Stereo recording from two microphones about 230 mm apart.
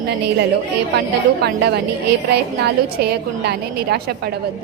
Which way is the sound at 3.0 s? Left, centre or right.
Right.